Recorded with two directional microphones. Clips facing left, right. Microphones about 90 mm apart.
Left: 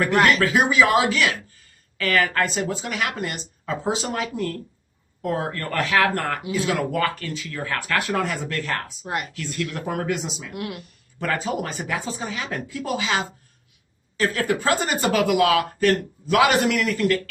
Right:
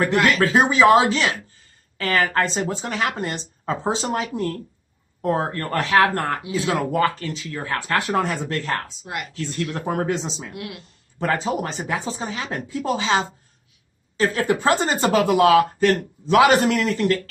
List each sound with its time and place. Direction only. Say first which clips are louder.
0.3 s a man's voice: right 1 dB; 30° right (ahead or behind)
10.6 s a woman's voice: left 7 dB; 35° left (ahead or behind)
11.2 s a man's voice: right 2 dB; 25° right (ahead or behind)